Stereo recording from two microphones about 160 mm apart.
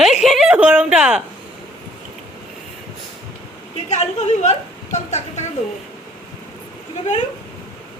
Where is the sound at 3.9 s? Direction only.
45° left (ahead or behind).